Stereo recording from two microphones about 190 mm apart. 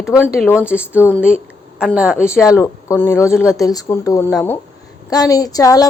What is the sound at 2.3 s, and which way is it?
A woman's voice, 15° left (ahead or behind).